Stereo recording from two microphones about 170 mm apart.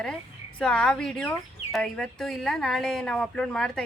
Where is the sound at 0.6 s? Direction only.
5° left (ahead or behind).